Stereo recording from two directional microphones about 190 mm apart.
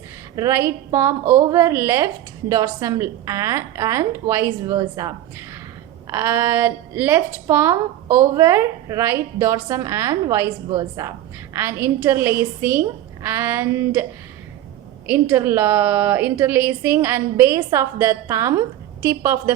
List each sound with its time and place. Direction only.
0.3 s a woman's voice: 15° right (ahead or behind)